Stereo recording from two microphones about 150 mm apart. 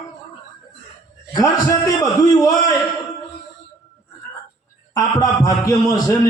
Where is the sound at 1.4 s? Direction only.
25° left (ahead or behind).